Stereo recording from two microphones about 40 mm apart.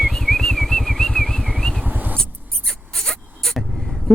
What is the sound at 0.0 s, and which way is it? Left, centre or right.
Vehicle, centre.